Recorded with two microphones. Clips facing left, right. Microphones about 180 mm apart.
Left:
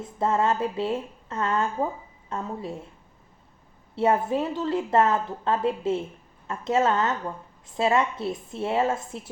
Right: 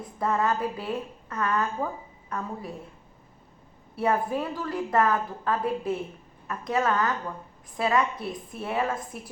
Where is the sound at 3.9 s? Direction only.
25° left (ahead or behind).